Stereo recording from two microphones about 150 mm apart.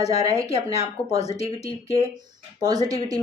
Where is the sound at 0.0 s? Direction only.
40° left (ahead or behind).